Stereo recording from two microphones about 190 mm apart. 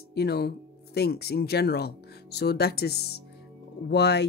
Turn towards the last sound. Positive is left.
turn(degrees=60)  # may be behind; listen again after turning